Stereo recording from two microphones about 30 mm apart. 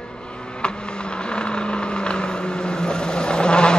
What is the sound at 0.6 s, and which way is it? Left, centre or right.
Vehicle, left.